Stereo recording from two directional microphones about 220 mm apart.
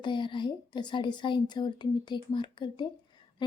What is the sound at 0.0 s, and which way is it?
A woman's voice, 20° left (ahead or behind).